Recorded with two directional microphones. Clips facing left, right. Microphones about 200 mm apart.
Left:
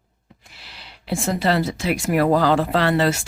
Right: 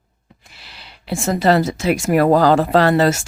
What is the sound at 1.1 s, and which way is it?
Speech, 45° right (ahead or behind).